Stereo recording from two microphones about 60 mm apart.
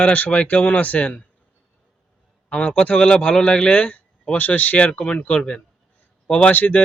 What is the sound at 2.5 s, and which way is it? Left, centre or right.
A man's voice, left.